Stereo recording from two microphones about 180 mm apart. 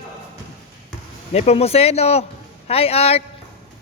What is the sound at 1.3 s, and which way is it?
Speech, 35° left (ahead or behind).